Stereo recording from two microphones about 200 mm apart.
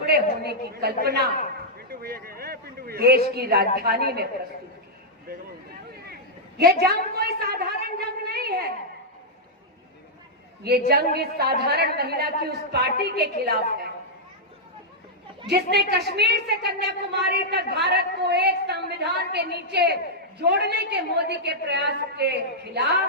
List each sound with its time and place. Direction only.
0.0 s a woman's voice: 55° right (ahead or behind)
1.9 s a sound: 50° right (ahead or behind)
3.3 s a woman's voice: 50° right (ahead or behind)
6.6 s a sound: 50° right (ahead or behind)
10.6 s a woman's voice: 50° right (ahead or behind)
15.4 s a woman's voice: 55° right (ahead or behind)